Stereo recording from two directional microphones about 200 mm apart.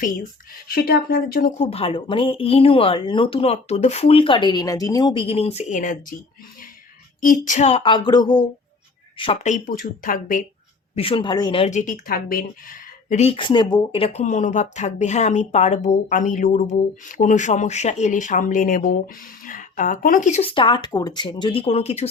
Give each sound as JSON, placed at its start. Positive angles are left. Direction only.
{"t": 0.7, "sound": "speech", "side_deg": 50}
{"t": 1.7, "sound": "speech", "side_deg": 25}
{"t": 7.2, "sound": "speech", "side_deg": 40}
{"t": 10.9, "sound": "speech", "side_deg": 25}
{"t": 13.1, "sound": "speech", "side_deg": 30}